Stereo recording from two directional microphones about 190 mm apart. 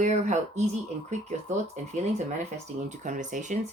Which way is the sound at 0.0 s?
40° right (ahead or behind).